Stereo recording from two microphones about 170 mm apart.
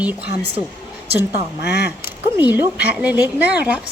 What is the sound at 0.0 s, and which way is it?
Speech, 10° right (ahead or behind).